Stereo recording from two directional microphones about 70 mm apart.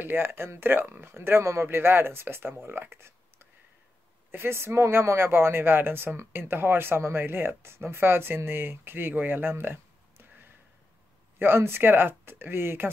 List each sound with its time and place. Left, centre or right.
0.0 s speech: right
11.3 s speech: right